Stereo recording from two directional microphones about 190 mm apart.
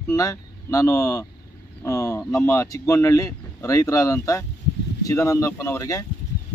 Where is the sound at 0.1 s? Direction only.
20° left (ahead or behind).